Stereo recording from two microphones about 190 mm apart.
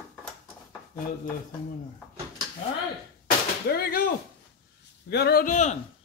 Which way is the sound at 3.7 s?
55° left (ahead or behind).